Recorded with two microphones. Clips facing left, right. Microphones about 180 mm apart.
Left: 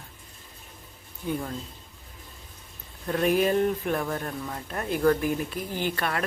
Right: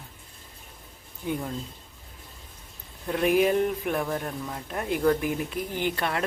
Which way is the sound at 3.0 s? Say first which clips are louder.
Right 1 dB; 15° right (ahead or behind).